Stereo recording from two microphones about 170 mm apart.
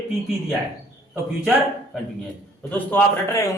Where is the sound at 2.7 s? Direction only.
10° left (ahead or behind).